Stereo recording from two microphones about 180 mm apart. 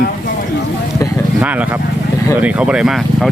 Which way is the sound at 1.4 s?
10° right (ahead or behind).